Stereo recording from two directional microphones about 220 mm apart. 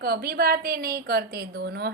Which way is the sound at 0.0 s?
45° right (ahead or behind).